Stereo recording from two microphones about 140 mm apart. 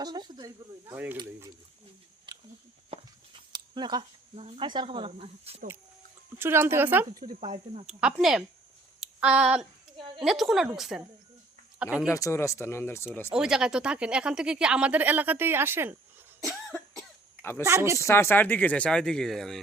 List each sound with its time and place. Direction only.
0.0 s speech: 30° right (ahead or behind)
0.9 s speech: 15° right (ahead or behind)
2.3 s a sound: 35° right (ahead or behind)
2.9 s a sound: 50° right (ahead or behind)
3.5 s speech: 30° right (ahead or behind)
6.4 s speech: 15° right (ahead or behind)
7.5 s speech: 50° right (ahead or behind)
7.9 s speech: 5° right (ahead or behind)
12.1 s speech: 20° left (ahead or behind)
13.3 s speech: 5° right (ahead or behind)
17.6 s speech: 20° right (ahead or behind)
18.0 s speech: 15° left (ahead or behind)